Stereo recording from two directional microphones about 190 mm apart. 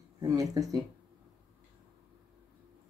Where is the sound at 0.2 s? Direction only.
20° right (ahead or behind).